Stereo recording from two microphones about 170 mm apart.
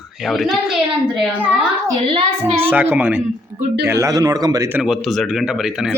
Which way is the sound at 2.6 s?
10° right (ahead or behind).